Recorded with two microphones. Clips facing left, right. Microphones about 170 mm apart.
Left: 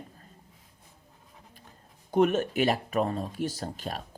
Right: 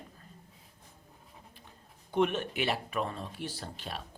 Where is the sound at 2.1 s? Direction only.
45° left (ahead or behind).